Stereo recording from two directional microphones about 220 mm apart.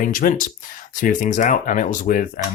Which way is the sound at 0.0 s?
40° left (ahead or behind).